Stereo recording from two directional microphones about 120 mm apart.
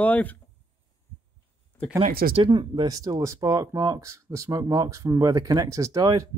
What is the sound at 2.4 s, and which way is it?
Speech, 40° right (ahead or behind).